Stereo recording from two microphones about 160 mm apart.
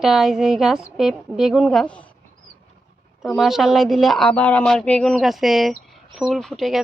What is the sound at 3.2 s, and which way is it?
Speech, centre (ahead or behind).